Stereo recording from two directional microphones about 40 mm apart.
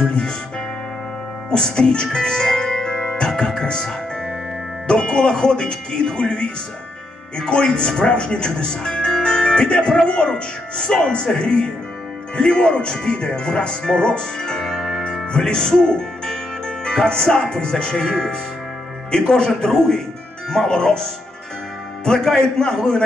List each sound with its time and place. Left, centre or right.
1.5 s speech: centre
15.3 s speech: centre
22.0 s a man's voice: centre